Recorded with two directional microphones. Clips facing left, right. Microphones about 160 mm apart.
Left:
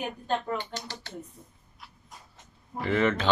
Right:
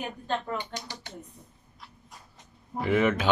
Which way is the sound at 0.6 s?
15° right (ahead or behind).